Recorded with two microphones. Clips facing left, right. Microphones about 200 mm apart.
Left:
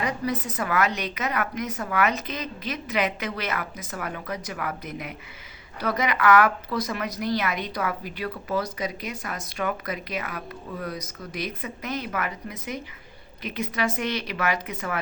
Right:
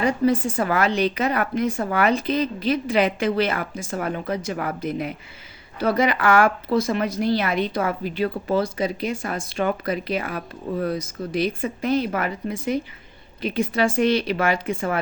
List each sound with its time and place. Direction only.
0.0 s a woman's voice: 30° right (ahead or behind)